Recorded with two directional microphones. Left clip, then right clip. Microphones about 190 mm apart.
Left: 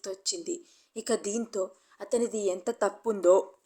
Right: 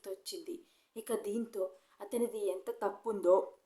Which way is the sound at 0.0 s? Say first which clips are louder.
Left 9 dB; 30° left (ahead or behind).